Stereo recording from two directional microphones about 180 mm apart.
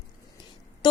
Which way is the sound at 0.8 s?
25° left (ahead or behind).